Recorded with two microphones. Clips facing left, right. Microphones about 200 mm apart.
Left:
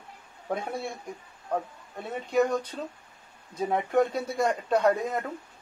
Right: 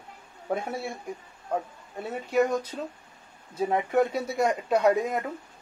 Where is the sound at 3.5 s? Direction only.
5° right (ahead or behind).